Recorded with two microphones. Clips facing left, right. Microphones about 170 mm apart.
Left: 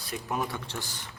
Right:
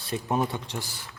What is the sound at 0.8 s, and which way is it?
Speech, 20° left (ahead or behind).